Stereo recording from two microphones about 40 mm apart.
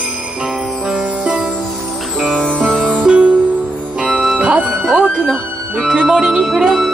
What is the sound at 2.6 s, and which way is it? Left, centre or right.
Music, centre.